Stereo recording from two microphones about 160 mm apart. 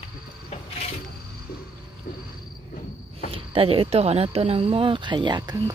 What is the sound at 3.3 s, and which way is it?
Speech, 35° right (ahead or behind).